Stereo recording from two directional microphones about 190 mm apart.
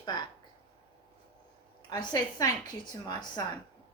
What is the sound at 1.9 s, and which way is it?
A woman's voice, 20° left (ahead or behind).